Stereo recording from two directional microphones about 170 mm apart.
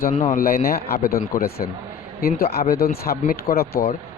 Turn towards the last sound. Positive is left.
turn(degrees=65)  # may be behind; listen again after turning